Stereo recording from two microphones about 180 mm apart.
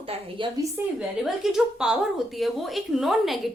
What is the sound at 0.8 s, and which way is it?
Speech, 10° right (ahead or behind).